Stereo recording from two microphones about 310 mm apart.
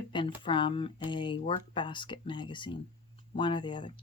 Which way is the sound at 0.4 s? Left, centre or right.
Centre.